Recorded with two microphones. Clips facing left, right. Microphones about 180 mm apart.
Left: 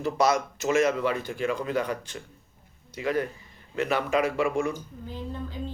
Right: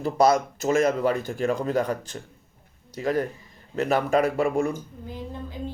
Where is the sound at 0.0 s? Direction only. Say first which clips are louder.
Right 4 dB; 35° right (ahead or behind).